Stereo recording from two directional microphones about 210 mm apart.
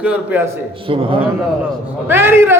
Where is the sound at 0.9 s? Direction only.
25° right (ahead or behind).